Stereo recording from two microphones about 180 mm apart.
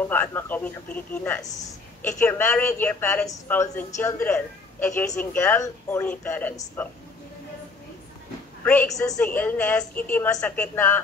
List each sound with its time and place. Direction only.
0.0 s a man's voice: 10° left (ahead or behind)
8.6 s a man's voice: 15° left (ahead or behind)